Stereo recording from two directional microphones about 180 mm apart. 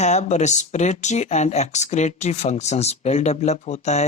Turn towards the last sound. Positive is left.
turn(degrees=40)  # may be behind; listen again after turning